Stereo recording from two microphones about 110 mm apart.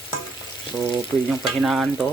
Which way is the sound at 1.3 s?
Centre (ahead or behind).